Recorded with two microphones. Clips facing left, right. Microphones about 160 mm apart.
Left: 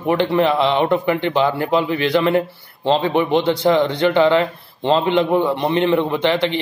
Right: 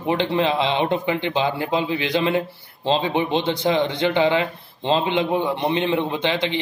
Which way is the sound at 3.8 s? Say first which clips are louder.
Left 4 dB; 20° right (ahead or behind).